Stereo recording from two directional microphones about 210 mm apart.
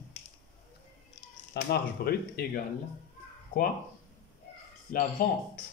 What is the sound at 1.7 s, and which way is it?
Speech, 45° left (ahead or behind).